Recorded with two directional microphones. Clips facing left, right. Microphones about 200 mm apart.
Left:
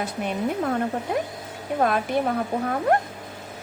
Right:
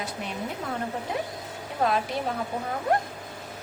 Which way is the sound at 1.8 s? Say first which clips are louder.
Left 2 dB; 55° left (ahead or behind).